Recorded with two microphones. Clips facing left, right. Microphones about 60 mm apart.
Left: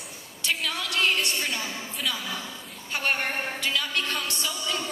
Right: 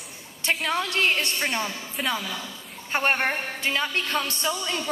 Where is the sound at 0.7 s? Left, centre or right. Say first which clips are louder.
Right 2 dB; right.